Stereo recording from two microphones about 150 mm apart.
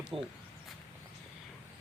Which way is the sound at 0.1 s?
Centre (ahead or behind).